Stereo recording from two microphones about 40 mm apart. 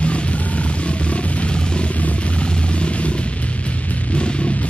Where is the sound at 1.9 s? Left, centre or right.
Left.